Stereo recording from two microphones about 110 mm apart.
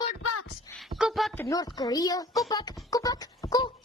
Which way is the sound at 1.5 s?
35° left (ahead or behind).